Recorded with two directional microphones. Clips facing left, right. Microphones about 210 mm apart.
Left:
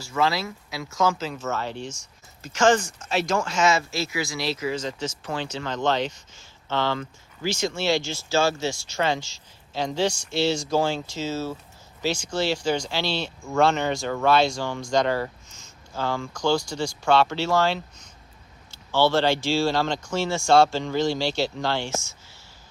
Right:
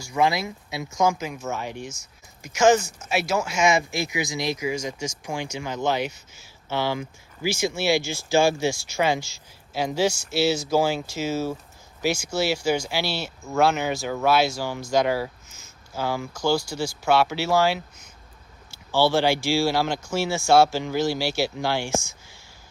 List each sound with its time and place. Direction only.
0.0 s speech: 15° right (ahead or behind)